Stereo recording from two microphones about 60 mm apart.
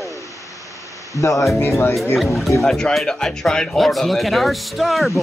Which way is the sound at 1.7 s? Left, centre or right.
Left.